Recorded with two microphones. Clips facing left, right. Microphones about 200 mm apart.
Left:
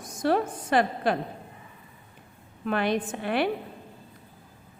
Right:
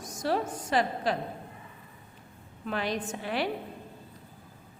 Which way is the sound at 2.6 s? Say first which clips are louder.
Left 5 dB; 60° left (ahead or behind).